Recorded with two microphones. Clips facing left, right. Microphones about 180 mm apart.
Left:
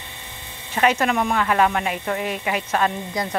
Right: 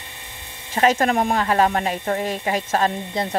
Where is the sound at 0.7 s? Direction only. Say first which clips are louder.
Right 2 dB; 40° right (ahead or behind).